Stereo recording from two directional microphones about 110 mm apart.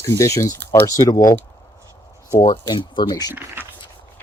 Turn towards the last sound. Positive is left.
turn(degrees=-20)  # may be behind; listen again after turning